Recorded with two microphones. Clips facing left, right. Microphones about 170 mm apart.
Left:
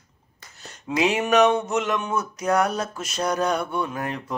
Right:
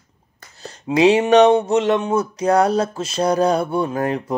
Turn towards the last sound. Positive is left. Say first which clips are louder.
# right 8 dB
turn(degrees=-35)  # may be behind; listen again after turning